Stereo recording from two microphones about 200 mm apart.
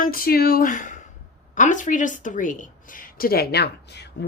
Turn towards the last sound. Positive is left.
turn(degrees=55)  # may be behind; listen again after turning